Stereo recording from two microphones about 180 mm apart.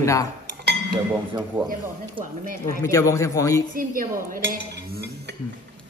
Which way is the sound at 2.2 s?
50° right (ahead or behind).